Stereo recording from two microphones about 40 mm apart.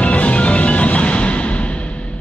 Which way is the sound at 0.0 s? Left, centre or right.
Left.